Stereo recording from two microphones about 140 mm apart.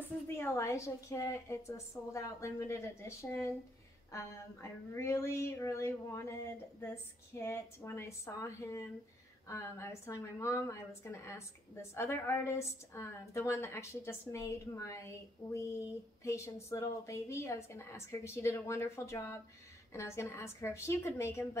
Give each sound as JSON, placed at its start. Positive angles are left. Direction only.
{"t": 0.3, "sound": "a woman's voice", "side_deg": 15}